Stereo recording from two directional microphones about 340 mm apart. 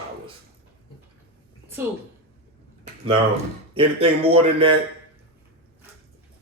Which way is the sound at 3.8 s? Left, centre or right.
Centre.